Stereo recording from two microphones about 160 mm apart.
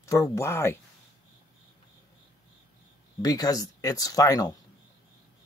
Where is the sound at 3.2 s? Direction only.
25° left (ahead or behind).